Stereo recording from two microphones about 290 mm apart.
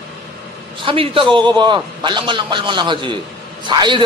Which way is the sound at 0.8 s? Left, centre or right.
Centre.